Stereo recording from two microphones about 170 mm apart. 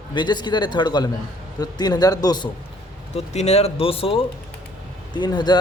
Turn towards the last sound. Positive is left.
turn(degrees=25)  # may be behind; listen again after turning